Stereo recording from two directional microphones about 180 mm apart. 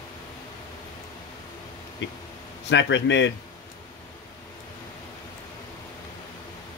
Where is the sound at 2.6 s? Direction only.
85° left.